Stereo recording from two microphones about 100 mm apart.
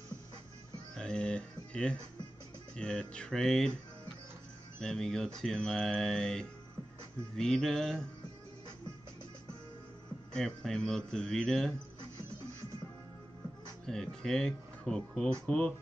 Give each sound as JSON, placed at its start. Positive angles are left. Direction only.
{"t": 0.9, "sound": "a sound", "side_deg": 10}
{"t": 2.7, "sound": "speech", "side_deg": 10}
{"t": 4.7, "sound": "speech", "side_deg": 5}
{"t": 10.3, "sound": "speech", "side_deg": 5}
{"t": 13.8, "sound": "speech", "side_deg": 5}